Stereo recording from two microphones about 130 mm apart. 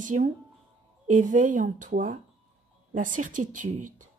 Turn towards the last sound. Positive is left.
turn(degrees=-85)